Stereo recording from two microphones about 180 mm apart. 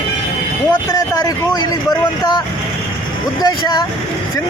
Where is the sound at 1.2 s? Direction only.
20° left (ahead or behind).